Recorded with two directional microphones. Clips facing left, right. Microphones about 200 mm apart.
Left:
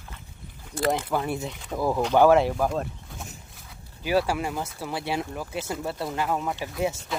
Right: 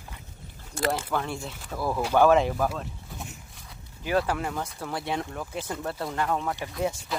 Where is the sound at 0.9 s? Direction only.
10° left (ahead or behind).